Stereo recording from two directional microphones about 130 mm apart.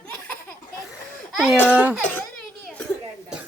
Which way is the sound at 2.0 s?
10° left (ahead or behind).